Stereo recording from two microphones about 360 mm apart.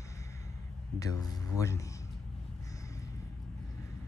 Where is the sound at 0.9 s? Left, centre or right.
Centre.